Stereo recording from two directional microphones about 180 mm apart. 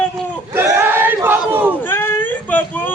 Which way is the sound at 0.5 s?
10° right (ahead or behind).